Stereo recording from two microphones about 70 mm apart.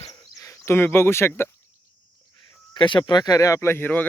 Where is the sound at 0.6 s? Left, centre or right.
Left.